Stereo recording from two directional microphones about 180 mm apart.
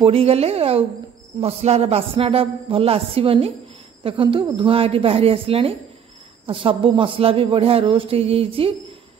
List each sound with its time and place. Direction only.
0.0 s a man's voice: 35° right (ahead or behind)